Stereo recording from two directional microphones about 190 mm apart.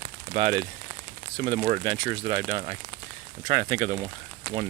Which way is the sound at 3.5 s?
25° right (ahead or behind).